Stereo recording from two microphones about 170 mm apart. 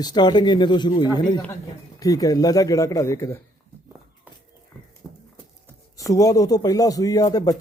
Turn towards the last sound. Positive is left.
turn(degrees=20)  # may be behind; listen again after turning